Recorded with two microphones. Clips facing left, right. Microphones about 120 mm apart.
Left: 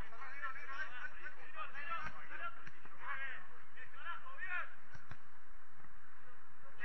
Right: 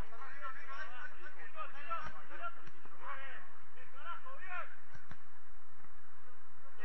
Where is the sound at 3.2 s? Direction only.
35° right (ahead or behind).